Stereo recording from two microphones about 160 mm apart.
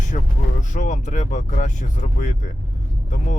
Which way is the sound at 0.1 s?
60° left (ahead or behind).